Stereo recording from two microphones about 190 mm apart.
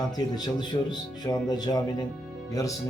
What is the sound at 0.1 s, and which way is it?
Speech, 20° left (ahead or behind).